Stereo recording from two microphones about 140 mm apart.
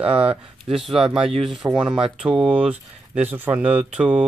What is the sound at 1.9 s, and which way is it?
Speech, 40° right (ahead or behind).